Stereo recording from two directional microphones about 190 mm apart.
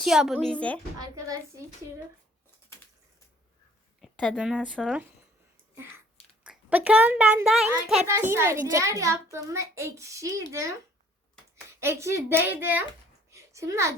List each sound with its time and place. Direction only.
0.0 s speech: centre (ahead or behind)
0.9 s a woman's voice: 20° right (ahead or behind)
4.0 s speech: centre (ahead or behind)
6.4 s a child's voice: 5° right (ahead or behind)
8.0 s a child's voice: 15° right (ahead or behind)
11.8 s a child's voice: 15° right (ahead or behind)
13.3 s a sound: 15° right (ahead or behind)